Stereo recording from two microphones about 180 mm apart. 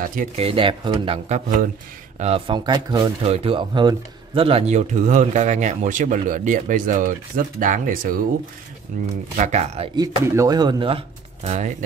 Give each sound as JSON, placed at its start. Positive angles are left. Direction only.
{"t": 0.0, "sound": "speech", "side_deg": -50}
{"t": 0.4, "sound": "speech", "side_deg": -30}
{"t": 9.9, "sound": "speech", "side_deg": -20}